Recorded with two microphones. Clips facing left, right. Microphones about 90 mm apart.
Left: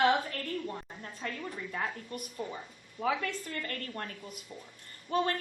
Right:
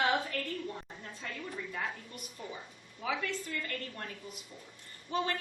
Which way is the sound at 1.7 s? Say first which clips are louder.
Left 3 dB; 45° left (ahead or behind).